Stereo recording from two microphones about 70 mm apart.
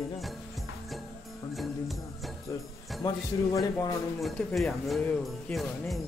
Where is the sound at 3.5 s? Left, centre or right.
Left.